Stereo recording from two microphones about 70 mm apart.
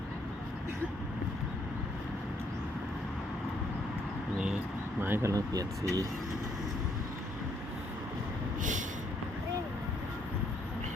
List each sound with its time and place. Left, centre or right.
4.9 s speech: right
5.3 s speech: right